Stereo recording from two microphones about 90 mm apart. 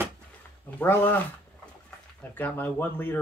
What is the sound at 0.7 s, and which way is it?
Speech, 20° left (ahead or behind).